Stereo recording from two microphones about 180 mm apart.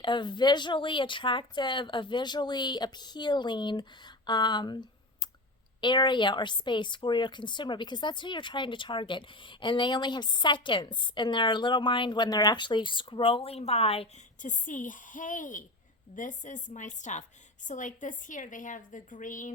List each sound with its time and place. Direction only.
0.0 s a woman's voice: 25° left (ahead or behind); by 19.5 s 45° left (ahead or behind)